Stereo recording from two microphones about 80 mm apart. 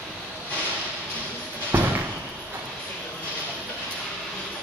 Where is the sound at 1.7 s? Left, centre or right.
Right.